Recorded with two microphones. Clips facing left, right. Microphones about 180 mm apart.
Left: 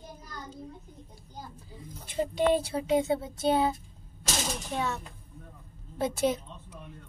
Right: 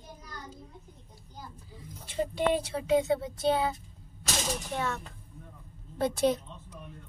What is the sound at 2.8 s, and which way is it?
Speech, 25° left (ahead or behind).